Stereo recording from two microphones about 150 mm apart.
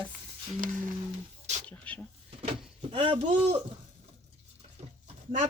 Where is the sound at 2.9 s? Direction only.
35° right (ahead or behind).